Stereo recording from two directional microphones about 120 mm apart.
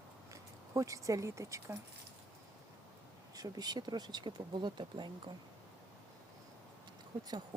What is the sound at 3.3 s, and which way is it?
Speech, 35° right (ahead or behind).